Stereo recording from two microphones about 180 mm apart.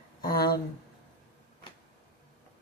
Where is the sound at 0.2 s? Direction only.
55° left (ahead or behind).